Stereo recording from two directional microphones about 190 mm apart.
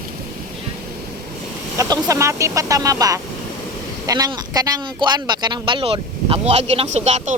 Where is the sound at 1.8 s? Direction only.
15° right (ahead or behind).